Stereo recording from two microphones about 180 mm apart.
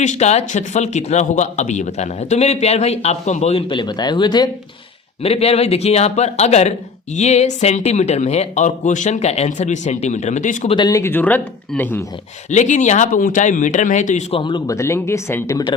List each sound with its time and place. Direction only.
0.0 s a man's voice: 40° left (ahead or behind)
10.8 s speech: 20° left (ahead or behind)
12.5 s a man's voice: 40° left (ahead or behind); by 14.8 s 25° left (ahead or behind)
14.8 s speech: 15° left (ahead or behind)